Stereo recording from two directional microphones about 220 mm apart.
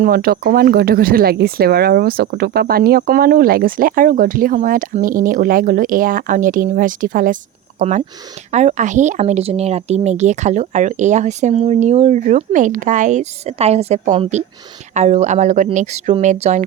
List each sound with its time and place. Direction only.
0.0 s speech: 45° right (ahead or behind)